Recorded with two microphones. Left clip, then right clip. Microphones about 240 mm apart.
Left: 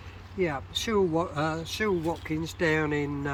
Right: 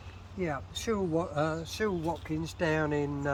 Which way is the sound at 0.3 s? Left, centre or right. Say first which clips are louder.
Left 6 dB; centre.